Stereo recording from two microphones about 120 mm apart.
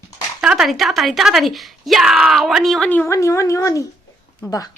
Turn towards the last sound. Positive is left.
turn(degrees=30)  # may be behind; listen again after turning